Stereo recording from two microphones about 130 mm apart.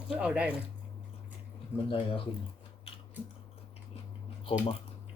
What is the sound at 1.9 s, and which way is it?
Speech, 45° left (ahead or behind).